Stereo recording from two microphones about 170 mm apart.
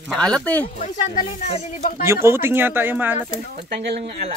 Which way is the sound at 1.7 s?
55° left (ahead or behind).